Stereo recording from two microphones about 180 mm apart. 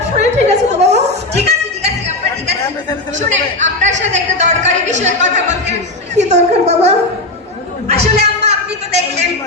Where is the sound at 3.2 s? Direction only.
40° right (ahead or behind).